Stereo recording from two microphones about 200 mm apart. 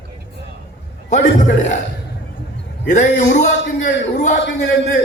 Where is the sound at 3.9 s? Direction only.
60° left (ahead or behind).